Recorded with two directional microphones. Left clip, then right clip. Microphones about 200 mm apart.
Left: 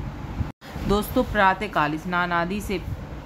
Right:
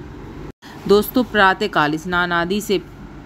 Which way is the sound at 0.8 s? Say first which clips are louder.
Right 8 dB; 25° right (ahead or behind).